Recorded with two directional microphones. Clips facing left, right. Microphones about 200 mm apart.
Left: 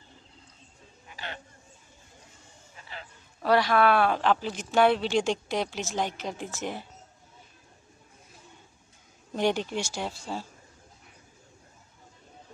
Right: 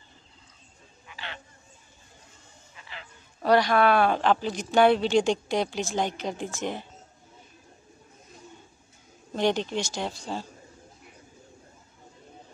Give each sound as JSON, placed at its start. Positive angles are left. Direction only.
{"t": 1.0, "sound": "a sound", "side_deg": 45}
{"t": 2.7, "sound": "music", "side_deg": 40}
{"t": 3.4, "sound": "speech", "side_deg": 0}
{"t": 9.3, "sound": "speech", "side_deg": 10}